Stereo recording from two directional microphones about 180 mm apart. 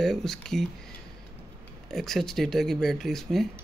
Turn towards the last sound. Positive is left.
turn(degrees=0)  # may be behind; listen again after turning